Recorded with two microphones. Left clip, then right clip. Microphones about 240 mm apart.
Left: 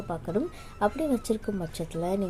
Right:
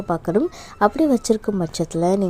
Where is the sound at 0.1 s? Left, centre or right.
Right.